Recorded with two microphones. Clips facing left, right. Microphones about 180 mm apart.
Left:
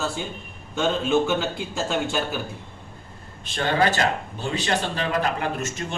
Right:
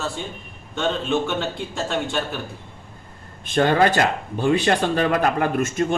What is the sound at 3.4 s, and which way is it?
Speech, 50° right (ahead or behind).